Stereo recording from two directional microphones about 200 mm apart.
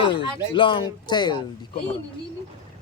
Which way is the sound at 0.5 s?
25° left (ahead or behind).